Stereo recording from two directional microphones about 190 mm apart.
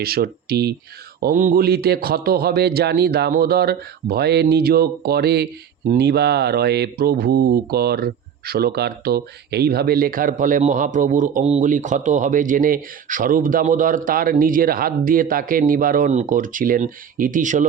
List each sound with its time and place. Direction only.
0.0 s a man's voice: 55° right (ahead or behind)
1.2 s a man's voice: 45° right (ahead or behind)